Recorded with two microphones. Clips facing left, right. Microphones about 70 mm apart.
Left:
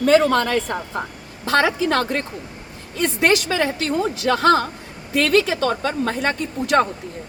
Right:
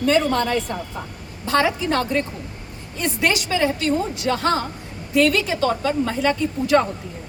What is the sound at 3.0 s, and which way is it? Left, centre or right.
Speech, left.